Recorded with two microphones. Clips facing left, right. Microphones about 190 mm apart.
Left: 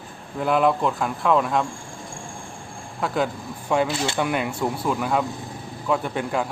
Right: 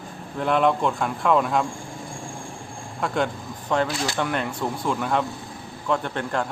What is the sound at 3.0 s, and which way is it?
A man's voice, 5° left (ahead or behind).